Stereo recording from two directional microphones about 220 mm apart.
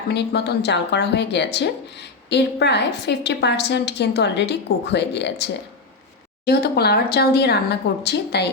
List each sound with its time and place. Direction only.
0.1 s speech: 50° left (ahead or behind)